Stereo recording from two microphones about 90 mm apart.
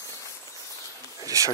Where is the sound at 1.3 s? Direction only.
35° right (ahead or behind).